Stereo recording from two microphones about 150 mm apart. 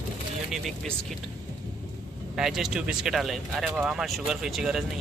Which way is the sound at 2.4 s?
5° right (ahead or behind).